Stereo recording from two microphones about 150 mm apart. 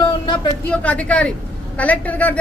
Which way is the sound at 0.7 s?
10° left (ahead or behind).